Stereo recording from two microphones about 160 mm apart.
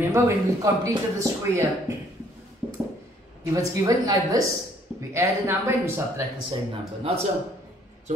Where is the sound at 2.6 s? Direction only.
5° right (ahead or behind).